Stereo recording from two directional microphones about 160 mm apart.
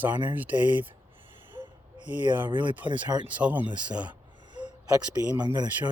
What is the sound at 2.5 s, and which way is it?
Speech, 30° right (ahead or behind).